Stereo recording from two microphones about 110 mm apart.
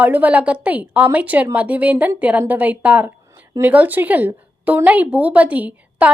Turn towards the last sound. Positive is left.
turn(degrees=-15)  # may be behind; listen again after turning